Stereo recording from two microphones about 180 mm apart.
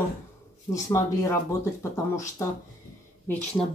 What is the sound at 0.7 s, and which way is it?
Speech, 15° left (ahead or behind).